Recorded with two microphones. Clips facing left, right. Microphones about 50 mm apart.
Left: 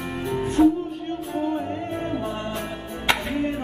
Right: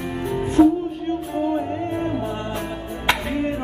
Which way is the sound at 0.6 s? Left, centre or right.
Centre.